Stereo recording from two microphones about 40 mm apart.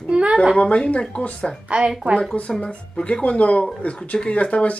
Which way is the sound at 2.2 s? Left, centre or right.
Centre.